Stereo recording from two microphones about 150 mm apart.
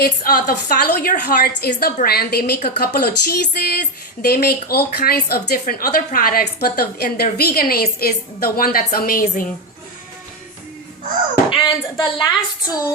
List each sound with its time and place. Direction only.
0.0 s a woman's voice: 75° left (ahead or behind)
11.5 s a woman's voice: 30° left (ahead or behind)